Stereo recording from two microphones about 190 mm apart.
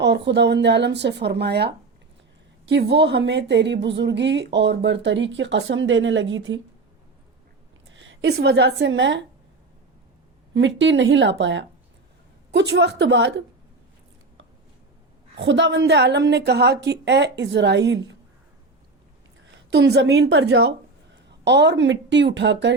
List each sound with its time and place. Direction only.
0.0 s a woman's voice: 65° right (ahead or behind)
7.9 s a woman's voice: 70° right (ahead or behind)
10.5 s a woman's voice: 70° right (ahead or behind)
15.4 s a woman's voice: 70° right (ahead or behind)
19.5 s a woman's voice: 65° right (ahead or behind)